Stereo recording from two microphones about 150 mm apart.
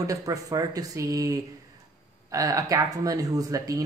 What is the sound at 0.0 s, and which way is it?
Speech, 20° right (ahead or behind).